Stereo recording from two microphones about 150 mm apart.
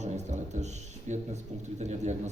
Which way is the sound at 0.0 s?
50° right (ahead or behind).